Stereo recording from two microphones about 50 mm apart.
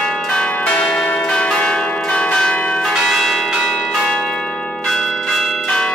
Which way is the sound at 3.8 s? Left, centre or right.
Centre.